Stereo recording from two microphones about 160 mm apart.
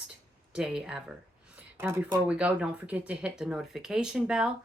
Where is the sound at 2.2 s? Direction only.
5° right (ahead or behind).